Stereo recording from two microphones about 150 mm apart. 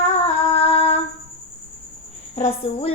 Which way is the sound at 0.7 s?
45° left (ahead or behind).